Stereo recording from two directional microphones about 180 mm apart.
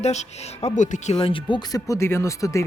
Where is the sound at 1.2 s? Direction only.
30° left (ahead or behind).